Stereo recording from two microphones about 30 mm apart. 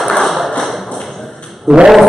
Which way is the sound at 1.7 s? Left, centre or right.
Right.